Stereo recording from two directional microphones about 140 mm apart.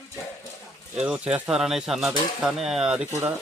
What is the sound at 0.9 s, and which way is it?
Speech, 10° right (ahead or behind).